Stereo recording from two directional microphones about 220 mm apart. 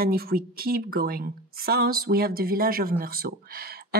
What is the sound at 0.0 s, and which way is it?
Speech, 45° right (ahead or behind).